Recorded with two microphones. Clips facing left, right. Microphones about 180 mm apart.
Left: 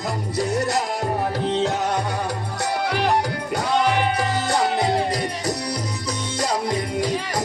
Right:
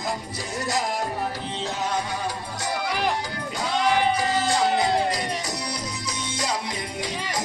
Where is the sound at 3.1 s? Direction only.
65° left (ahead or behind).